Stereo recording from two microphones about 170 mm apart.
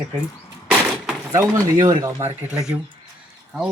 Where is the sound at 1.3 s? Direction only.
20° right (ahead or behind).